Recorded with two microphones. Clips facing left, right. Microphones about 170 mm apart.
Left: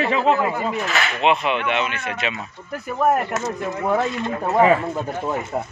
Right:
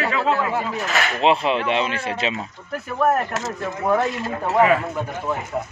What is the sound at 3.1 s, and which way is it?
Speech, 15° left (ahead or behind).